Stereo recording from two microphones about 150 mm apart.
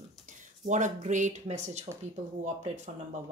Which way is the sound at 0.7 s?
55° right (ahead or behind).